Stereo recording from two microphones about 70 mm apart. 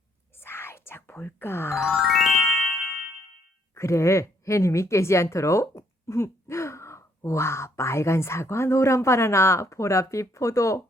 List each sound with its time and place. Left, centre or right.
0.3 s whispering: left
1.8 s music: centre
3.8 s speech: left